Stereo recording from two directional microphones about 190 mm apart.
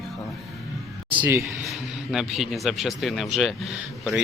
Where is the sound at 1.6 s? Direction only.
Centre (ahead or behind).